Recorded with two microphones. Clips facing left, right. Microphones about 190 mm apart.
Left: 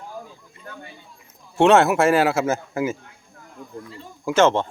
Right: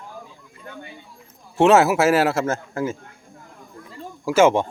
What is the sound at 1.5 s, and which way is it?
A man's voice, 5° right (ahead or behind).